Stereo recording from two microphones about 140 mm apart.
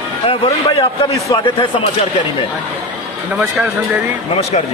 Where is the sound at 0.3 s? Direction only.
40° left (ahead or behind).